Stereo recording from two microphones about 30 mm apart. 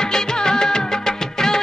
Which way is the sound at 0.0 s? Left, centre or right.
Left.